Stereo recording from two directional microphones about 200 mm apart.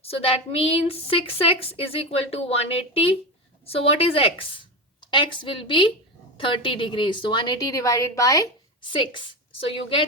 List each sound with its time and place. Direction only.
0.0 s a woman's voice: 30° left (ahead or behind)